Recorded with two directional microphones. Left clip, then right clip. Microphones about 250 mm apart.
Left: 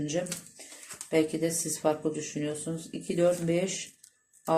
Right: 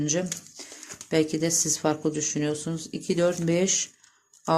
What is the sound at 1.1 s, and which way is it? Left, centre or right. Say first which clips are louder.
Speech: right 3 dB; right.